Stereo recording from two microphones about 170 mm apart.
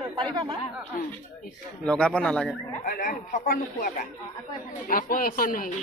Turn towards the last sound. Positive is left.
turn(degrees=55)  # may be behind; listen again after turning